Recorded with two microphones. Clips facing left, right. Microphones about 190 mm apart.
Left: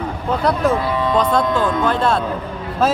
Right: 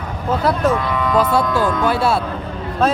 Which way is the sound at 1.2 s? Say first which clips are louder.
Right 1 dB; 10° right (ahead or behind).